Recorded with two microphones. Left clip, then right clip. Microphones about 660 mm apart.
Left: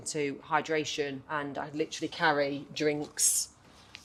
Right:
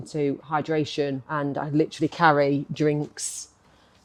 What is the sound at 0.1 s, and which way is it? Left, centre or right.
Speech, right.